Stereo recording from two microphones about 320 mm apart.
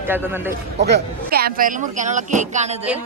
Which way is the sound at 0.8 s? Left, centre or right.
Right.